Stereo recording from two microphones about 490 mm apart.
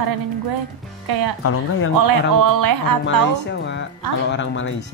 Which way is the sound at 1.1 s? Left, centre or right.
Right.